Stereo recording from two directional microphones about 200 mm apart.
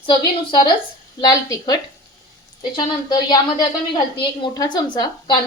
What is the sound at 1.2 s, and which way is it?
A woman's voice, 20° left (ahead or behind).